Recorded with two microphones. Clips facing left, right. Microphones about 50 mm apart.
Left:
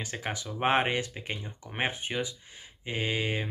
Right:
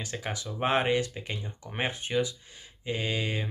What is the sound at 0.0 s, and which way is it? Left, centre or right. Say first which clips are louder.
Speech: even; left.